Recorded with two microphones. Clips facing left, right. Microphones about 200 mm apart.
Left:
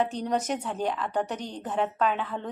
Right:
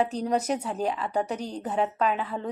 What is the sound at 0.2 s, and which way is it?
A woman's voice, 5° right (ahead or behind).